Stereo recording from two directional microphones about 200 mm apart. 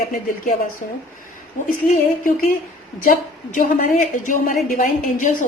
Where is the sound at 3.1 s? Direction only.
40° left (ahead or behind).